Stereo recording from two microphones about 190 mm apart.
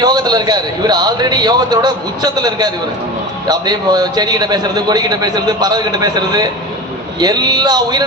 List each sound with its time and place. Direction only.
0.0 s a man's voice: 20° right (ahead or behind)